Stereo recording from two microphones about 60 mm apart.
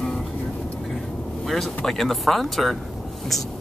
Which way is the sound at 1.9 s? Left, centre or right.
Centre.